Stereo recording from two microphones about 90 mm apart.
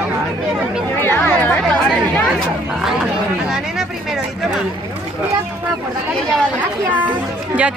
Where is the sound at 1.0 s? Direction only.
20° left (ahead or behind).